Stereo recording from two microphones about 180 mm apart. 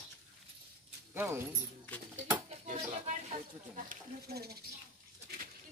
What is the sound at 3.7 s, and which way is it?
Speech, 55° right (ahead or behind).